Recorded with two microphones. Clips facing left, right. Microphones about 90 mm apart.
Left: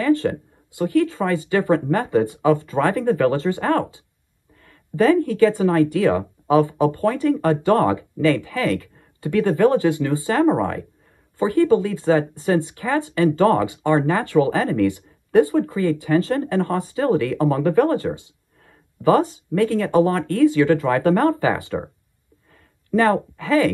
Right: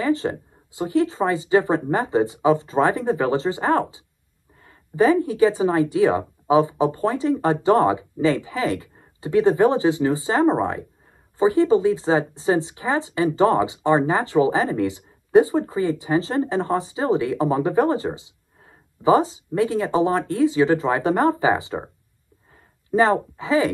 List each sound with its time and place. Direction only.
0.0 s speech: 20° right (ahead or behind)